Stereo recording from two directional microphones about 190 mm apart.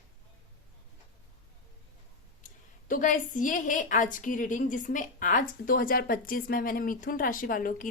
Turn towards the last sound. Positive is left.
turn(degrees=45)  # may be behind; listen again after turning